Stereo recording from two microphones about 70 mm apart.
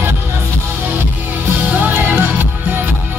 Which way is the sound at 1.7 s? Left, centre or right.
Right.